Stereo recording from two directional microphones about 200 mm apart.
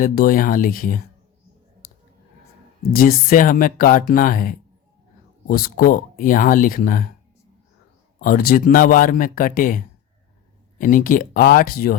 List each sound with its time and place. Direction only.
0.0 s speech: 45° left (ahead or behind)
1.8 s clicking: 50° left (ahead or behind)
2.9 s speech: 45° left (ahead or behind)
8.2 s speech: 45° left (ahead or behind)